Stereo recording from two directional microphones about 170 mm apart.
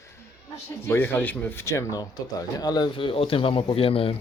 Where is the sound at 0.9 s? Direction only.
15° left (ahead or behind).